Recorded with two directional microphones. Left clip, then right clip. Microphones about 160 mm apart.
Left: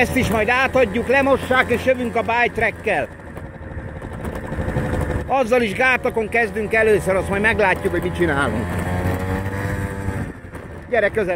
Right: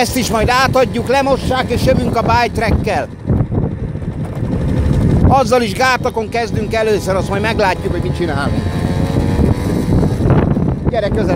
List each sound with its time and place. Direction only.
0.0 s speech: 25° right (ahead or behind)
1.3 s speech: 15° right (ahead or behind)
1.9 s speech: 25° right (ahead or behind)
5.3 s speech: 25° right (ahead or behind)